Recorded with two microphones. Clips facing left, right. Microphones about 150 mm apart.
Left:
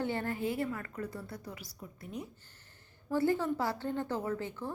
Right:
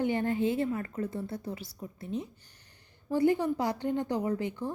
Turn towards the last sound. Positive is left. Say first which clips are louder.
# right 5 dB
turn(degrees=-15)  # may be behind; listen again after turning